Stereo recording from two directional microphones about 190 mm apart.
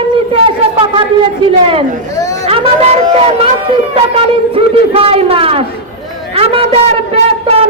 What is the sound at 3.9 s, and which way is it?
A woman's voice, 30° right (ahead or behind).